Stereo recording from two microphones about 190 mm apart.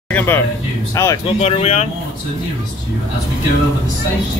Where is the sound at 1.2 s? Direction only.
30° left (ahead or behind).